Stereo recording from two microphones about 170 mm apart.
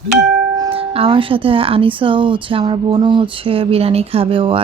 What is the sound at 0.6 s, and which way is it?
A woman's voice, 35° right (ahead or behind).